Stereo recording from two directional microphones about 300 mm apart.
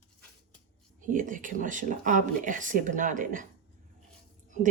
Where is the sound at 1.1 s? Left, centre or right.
Right.